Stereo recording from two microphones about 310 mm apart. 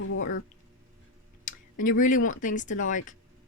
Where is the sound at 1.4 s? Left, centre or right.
Left.